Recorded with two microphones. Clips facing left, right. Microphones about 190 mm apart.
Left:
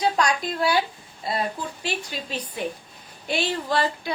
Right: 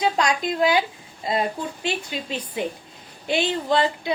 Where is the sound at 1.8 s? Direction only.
25° right (ahead or behind).